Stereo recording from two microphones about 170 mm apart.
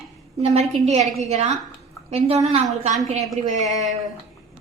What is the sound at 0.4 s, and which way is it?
A woman's voice, 40° right (ahead or behind).